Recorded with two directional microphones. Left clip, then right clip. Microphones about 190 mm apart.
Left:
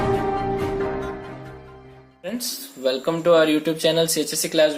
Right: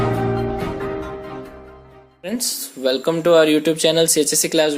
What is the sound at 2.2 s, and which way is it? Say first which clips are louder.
Speech: right 4 dB; 50° right (ahead or behind).